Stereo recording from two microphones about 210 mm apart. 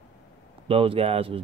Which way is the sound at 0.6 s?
25° right (ahead or behind).